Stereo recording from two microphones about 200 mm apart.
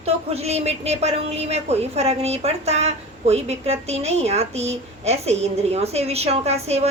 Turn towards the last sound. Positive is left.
turn(degrees=-30)  # may be behind; listen again after turning